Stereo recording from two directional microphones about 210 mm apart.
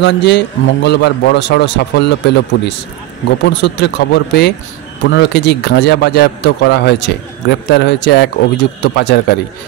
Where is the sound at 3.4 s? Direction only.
55° left (ahead or behind).